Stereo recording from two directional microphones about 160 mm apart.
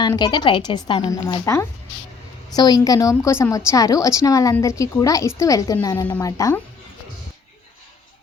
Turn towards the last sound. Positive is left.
turn(degrees=20)  # may be behind; listen again after turning